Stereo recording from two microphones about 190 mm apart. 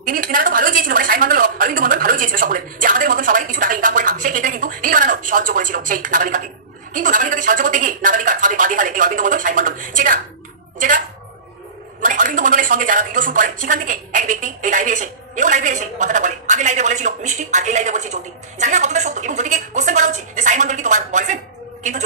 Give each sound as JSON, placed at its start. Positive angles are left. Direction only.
{"t": 0.0, "sound": "speech", "side_deg": -45}
{"t": 12.0, "sound": "speech", "side_deg": -45}